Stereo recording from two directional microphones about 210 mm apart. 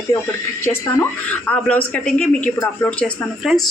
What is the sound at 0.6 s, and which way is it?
A woman's voice, 10° left (ahead or behind).